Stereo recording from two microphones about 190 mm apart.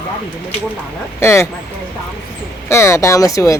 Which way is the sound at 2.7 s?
15° left (ahead or behind).